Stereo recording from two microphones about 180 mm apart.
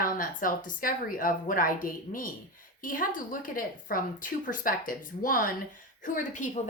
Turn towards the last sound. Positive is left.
turn(degrees=45)  # may be behind; listen again after turning